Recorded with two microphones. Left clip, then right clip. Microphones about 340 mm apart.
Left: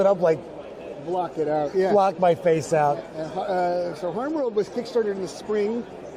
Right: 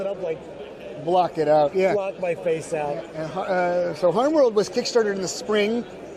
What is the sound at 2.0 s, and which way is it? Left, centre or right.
Speech, left.